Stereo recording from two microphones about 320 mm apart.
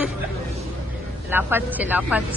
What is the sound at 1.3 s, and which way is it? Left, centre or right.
Speech, centre.